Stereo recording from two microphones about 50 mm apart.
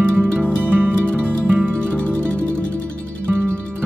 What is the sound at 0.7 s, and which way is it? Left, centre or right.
Music, right.